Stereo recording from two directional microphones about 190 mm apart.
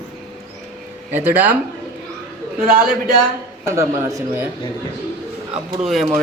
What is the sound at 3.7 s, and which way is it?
Speech, 15° right (ahead or behind).